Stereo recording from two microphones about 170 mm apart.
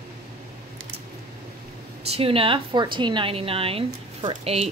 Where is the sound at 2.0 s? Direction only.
35° right (ahead or behind).